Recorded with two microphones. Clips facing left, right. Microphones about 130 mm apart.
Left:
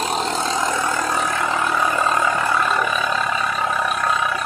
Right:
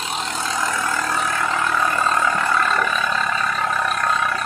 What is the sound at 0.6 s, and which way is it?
Vehicle, 20° left (ahead or behind).